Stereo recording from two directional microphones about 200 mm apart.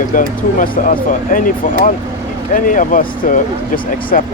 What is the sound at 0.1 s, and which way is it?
Speech, 40° left (ahead or behind).